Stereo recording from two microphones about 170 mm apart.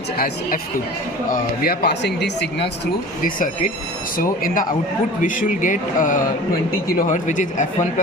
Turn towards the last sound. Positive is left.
turn(degrees=45)  # may be behind; listen again after turning